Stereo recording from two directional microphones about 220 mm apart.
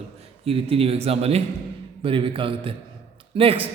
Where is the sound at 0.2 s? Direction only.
25° right (ahead or behind).